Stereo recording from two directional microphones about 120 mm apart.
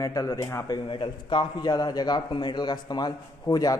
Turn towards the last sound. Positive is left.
turn(degrees=30)  # may be behind; listen again after turning